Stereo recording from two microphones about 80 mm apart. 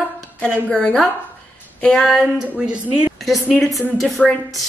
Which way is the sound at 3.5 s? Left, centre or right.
Centre.